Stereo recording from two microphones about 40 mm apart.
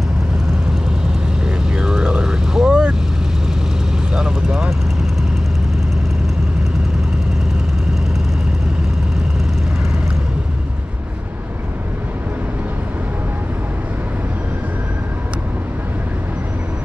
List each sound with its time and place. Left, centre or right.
1.7 s vehicle: right
4.1 s vehicle: centre